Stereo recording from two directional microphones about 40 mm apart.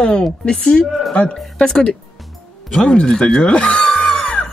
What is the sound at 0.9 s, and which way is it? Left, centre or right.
Speech, centre.